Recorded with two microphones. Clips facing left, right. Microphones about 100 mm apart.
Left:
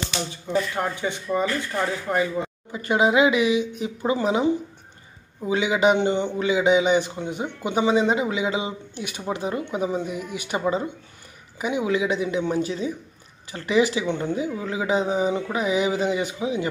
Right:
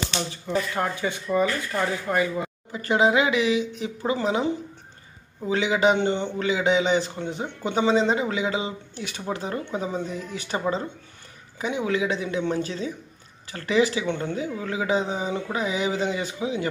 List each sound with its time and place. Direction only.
0.5 s a man's voice: 20° left (ahead or behind)